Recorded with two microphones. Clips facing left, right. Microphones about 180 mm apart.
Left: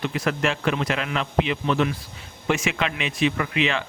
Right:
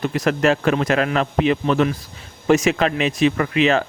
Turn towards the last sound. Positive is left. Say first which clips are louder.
# right 7 dB
turn(degrees=-40)  # may be behind; listen again after turning